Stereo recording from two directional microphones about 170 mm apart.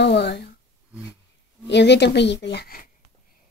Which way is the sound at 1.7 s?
90° left.